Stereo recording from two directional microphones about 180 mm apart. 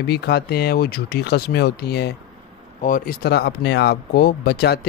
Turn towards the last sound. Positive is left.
turn(degrees=65)  # may be behind; listen again after turning